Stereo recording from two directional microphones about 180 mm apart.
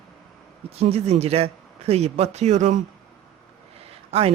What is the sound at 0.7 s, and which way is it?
Speech, 35° right (ahead or behind).